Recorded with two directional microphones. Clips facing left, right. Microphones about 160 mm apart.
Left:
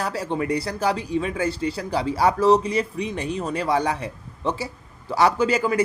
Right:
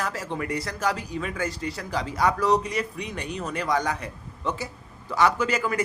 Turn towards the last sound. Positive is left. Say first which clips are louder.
# left 3 dB
turn(degrees=35)  # may be behind; listen again after turning